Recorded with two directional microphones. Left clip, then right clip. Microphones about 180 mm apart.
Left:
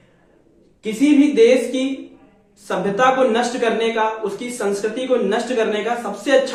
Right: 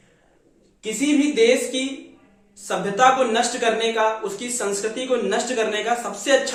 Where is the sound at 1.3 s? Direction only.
25° right (ahead or behind).